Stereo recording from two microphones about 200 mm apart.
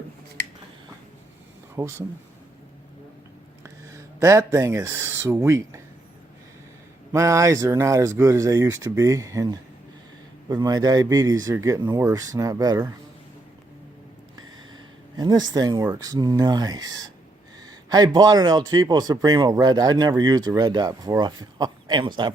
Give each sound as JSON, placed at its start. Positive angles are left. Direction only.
{"t": 1.7, "sound": "speech", "side_deg": -15}
{"t": 3.6, "sound": "speech", "side_deg": -15}
{"t": 7.1, "sound": "speech", "side_deg": -15}
{"t": 15.2, "sound": "speech", "side_deg": -20}